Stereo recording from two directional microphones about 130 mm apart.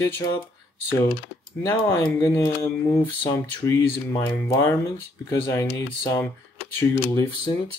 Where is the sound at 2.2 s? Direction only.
20° left (ahead or behind).